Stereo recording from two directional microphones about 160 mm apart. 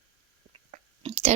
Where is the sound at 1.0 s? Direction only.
40° right (ahead or behind).